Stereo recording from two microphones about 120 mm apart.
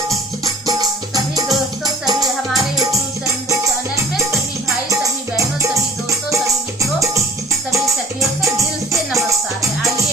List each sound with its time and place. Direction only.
0.4 s music: 30° right (ahead or behind)
5.4 s music: 25° right (ahead or behind)
8.2 s music: 25° right (ahead or behind)